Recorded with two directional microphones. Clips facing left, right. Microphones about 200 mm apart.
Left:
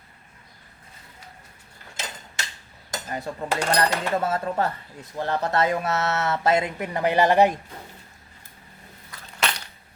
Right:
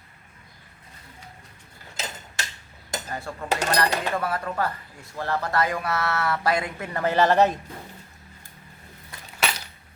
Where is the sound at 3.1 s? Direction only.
20° left (ahead or behind).